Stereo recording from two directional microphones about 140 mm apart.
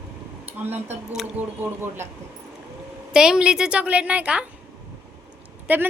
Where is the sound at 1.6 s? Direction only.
15° right (ahead or behind).